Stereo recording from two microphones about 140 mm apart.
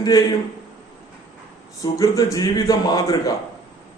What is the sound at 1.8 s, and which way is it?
A man's voice, 25° left (ahead or behind).